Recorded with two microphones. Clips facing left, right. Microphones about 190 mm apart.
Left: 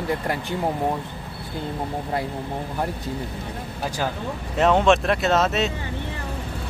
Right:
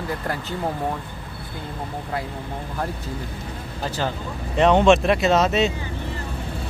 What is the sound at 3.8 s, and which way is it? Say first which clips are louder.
Speech: even; 10° left (ahead or behind).